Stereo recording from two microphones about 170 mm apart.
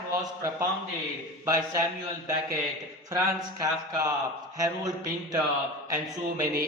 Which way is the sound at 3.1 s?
20° right (ahead or behind).